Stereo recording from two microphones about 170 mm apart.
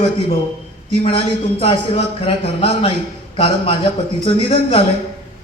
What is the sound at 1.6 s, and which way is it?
A man's voice, 35° left (ahead or behind).